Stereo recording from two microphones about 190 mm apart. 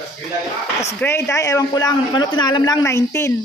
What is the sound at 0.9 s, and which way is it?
A man's voice, 10° left (ahead or behind).